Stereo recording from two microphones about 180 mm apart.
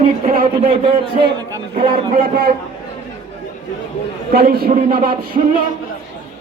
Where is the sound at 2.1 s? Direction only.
50° right (ahead or behind).